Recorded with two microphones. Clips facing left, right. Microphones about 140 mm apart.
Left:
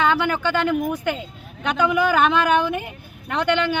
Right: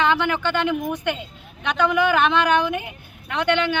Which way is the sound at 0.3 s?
10° left (ahead or behind).